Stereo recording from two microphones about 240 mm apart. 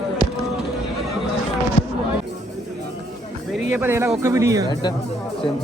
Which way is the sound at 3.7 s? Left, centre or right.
Centre.